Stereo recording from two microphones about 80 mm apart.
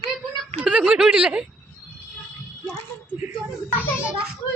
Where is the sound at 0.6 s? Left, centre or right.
Centre.